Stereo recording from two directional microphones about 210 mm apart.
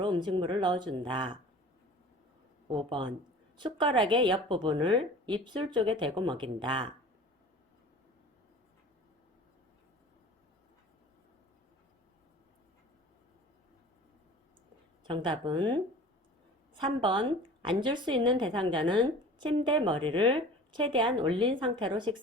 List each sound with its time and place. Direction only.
0.0 s a woman's voice: 20° right (ahead or behind)
2.7 s a woman's voice: 25° right (ahead or behind)
15.0 s a woman's voice: 20° right (ahead or behind)